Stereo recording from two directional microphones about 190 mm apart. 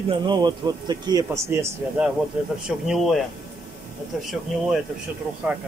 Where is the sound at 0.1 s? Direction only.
25° right (ahead or behind); by 4.3 s 5° right (ahead or behind).